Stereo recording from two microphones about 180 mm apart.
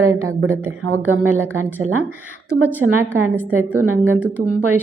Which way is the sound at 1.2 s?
10° right (ahead or behind).